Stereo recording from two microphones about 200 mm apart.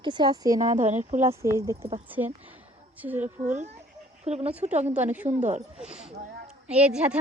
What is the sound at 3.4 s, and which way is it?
Speech, 35° right (ahead or behind).